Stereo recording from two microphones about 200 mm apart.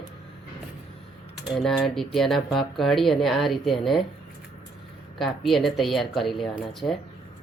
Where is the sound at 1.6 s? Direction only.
Centre (ahead or behind).